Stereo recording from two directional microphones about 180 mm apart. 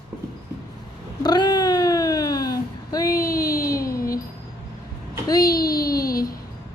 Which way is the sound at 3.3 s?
55° left (ahead or behind).